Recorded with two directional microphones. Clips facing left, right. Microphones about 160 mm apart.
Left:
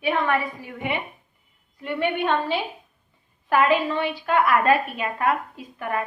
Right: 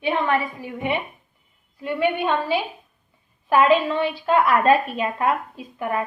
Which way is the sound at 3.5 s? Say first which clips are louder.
Right 3 dB; 20° right (ahead or behind).